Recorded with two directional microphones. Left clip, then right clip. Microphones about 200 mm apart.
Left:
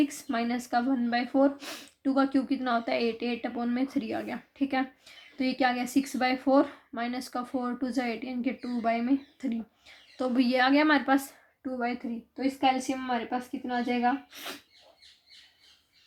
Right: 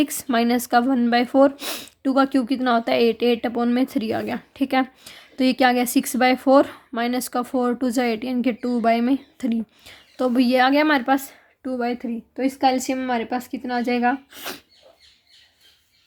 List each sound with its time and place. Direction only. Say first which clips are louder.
0.0 s speech: right 8 dB; 40° right (ahead or behind)
12.4 s speech: right 6 dB; 45° right (ahead or behind)